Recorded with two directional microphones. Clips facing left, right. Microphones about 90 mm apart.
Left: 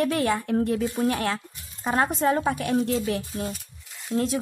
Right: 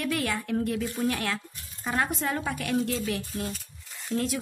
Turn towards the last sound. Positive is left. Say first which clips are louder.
# left 4 dB
turn(degrees=30)  # may be behind; listen again after turning